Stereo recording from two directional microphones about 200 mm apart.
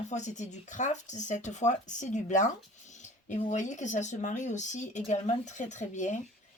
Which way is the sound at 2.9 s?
35° left (ahead or behind).